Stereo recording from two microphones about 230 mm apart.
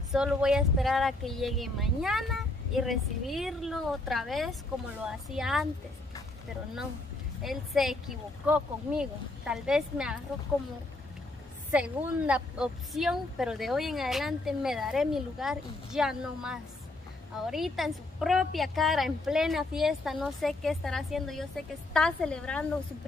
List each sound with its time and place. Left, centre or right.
0.1 s a woman's voice: centre
7.4 s a woman's voice: centre
11.7 s a woman's voice: centre